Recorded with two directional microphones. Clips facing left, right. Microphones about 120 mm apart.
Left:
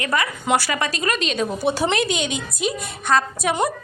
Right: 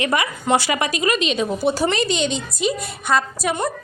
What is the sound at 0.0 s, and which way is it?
Speech, 15° right (ahead or behind).